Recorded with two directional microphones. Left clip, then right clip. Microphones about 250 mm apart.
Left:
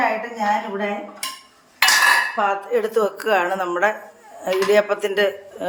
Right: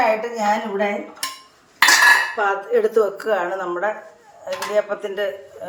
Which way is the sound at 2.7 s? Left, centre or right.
Left.